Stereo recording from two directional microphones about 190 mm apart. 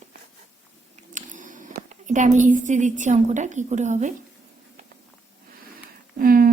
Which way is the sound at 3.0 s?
40° right (ahead or behind).